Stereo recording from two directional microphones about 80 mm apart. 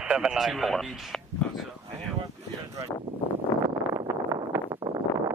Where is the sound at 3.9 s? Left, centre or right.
Right.